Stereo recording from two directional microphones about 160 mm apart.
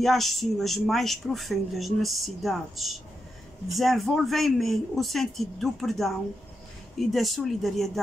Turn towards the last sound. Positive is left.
turn(degrees=0)  # may be behind; listen again after turning